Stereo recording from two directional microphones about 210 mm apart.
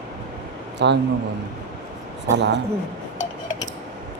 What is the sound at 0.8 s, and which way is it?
Speech, 55° right (ahead or behind).